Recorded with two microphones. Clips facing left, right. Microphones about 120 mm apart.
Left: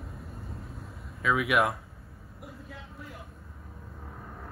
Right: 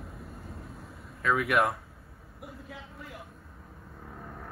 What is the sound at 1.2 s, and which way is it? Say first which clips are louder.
Speech: even; 5° left (ahead or behind).